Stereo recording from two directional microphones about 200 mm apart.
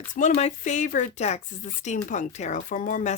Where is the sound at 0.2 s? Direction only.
35° left (ahead or behind).